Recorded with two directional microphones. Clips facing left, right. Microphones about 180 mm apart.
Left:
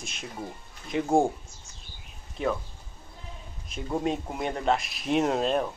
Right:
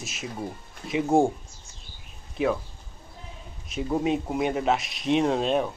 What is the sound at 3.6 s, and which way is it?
Speech, 5° right (ahead or behind).